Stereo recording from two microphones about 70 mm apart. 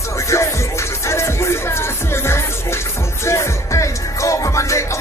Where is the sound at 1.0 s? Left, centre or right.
Left.